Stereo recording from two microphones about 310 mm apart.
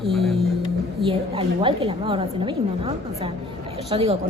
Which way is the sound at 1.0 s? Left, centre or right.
Centre.